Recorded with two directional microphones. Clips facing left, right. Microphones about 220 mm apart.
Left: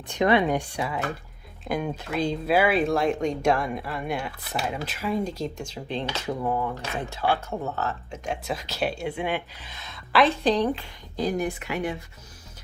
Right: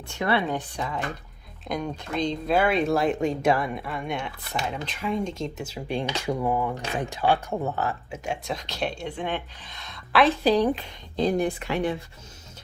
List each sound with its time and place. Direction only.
0.1 s speech: 20° left (ahead or behind); by 8.4 s 10° right (ahead or behind)
8.4 s speech: 5° left (ahead or behind); by 11.8 s 30° right (ahead or behind)